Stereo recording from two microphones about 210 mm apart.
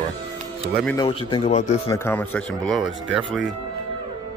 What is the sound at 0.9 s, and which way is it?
Speech, 25° left (ahead or behind).